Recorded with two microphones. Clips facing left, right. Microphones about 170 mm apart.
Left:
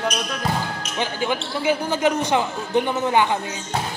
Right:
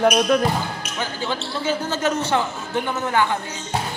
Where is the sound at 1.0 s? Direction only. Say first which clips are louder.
Left 3 dB; 15° left (ahead or behind).